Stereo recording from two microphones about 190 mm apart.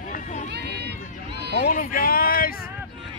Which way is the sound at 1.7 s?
50° left (ahead or behind).